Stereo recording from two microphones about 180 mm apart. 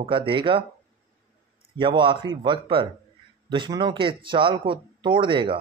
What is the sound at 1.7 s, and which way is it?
Speech, 25° right (ahead or behind).